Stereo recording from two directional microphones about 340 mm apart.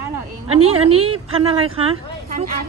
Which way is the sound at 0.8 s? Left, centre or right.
Centre.